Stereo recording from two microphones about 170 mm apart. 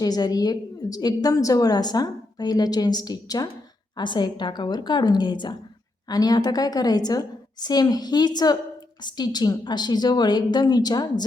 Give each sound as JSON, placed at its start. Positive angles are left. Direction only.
{"t": 0.0, "sound": "a woman's voice", "side_deg": 20}